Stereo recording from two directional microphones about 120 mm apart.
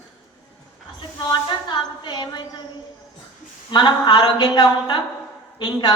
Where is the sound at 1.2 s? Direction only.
40° left (ahead or behind).